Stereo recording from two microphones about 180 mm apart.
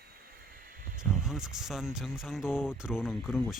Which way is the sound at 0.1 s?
55° right (ahead or behind).